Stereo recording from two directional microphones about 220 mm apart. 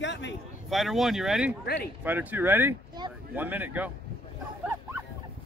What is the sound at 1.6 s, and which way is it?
Speech, 45° left (ahead or behind).